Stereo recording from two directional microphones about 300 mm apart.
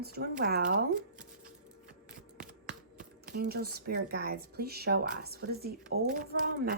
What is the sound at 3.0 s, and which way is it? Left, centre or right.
Speech, right.